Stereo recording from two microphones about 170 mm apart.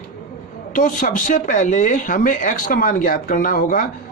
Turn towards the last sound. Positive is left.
turn(degrees=55)  # may be behind; listen again after turning